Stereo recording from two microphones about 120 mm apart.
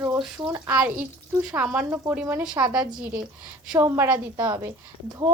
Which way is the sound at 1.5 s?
20° right (ahead or behind).